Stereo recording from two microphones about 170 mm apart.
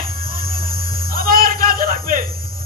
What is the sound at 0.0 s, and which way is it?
Music, 60° right (ahead or behind).